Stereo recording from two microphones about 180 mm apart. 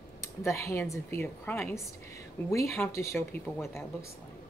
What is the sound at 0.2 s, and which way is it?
Speech, 15° left (ahead or behind).